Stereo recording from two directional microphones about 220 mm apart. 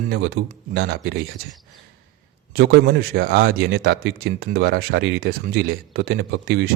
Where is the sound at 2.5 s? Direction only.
45° right (ahead or behind).